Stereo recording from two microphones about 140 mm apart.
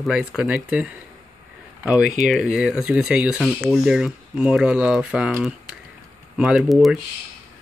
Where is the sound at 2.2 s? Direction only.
Centre (ahead or behind).